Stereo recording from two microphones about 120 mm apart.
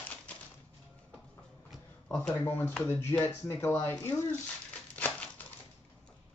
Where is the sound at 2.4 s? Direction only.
15° left (ahead or behind).